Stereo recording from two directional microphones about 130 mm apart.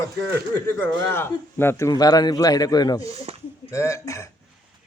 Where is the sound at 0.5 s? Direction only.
15° left (ahead or behind).